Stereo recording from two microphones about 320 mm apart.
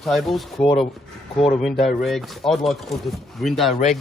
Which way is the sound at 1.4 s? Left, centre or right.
Centre.